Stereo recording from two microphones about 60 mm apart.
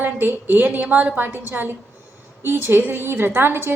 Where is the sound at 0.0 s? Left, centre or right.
Right.